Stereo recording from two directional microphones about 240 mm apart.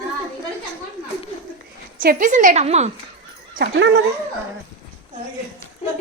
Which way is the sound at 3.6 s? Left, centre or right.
Right.